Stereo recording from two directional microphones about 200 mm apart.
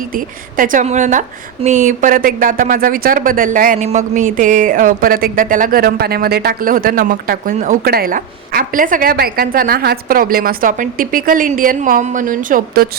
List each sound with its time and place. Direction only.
0.1 s a woman's voice: 45° right (ahead or behind)